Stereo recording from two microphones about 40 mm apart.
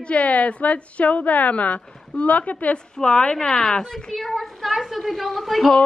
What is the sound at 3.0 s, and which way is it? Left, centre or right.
A woman's voice, left.